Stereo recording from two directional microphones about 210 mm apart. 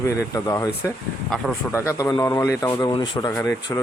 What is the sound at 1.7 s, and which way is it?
Speech, 15° left (ahead or behind).